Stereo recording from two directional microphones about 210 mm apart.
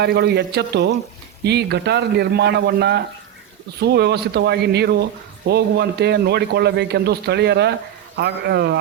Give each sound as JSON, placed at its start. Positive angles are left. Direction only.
{"t": 0.0, "sound": "a man's voice", "side_deg": -50}